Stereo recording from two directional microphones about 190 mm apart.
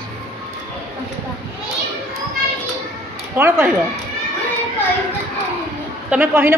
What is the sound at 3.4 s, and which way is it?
Speech, 10° right (ahead or behind).